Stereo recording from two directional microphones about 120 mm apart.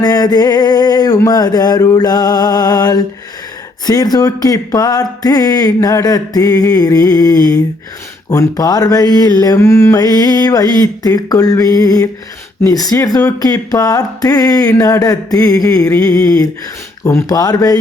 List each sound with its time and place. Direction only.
0.0 s speech: 35° left (ahead or behind)